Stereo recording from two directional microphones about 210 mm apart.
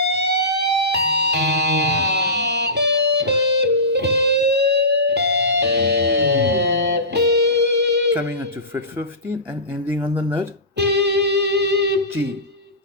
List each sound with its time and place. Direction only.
0.1 s music: 55° right (ahead or behind)
9.8 s speech: 10° right (ahead or behind)
10.8 s music: 55° right (ahead or behind)